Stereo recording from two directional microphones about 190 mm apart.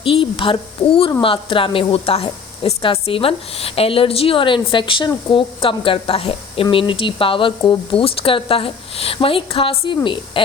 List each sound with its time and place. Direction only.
0.0 s a woman's voice: 30° left (ahead or behind)